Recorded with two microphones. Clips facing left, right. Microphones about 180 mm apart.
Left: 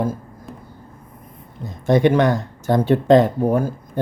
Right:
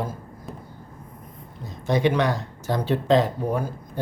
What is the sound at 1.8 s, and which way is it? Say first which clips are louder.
Speech: left 6 dB; 50° left (ahead or behind).